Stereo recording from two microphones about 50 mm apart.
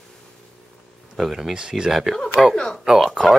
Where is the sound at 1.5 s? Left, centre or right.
Centre.